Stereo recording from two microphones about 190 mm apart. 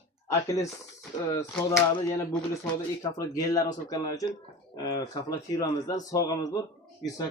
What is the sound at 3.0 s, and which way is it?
Speech, 20° left (ahead or behind).